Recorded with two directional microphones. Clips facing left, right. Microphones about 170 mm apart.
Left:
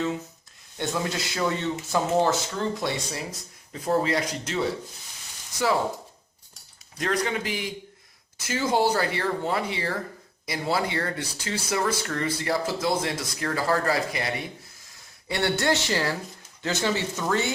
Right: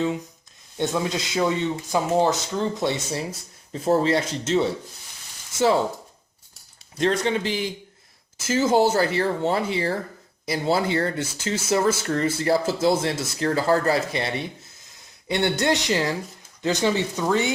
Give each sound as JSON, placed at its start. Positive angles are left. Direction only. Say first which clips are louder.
{"t": 0.9, "sound": "speech", "louder": "right 3 dB", "side_deg": -20}
{"t": 7.0, "sound": "speech", "louder": "right 5 dB", "side_deg": -25}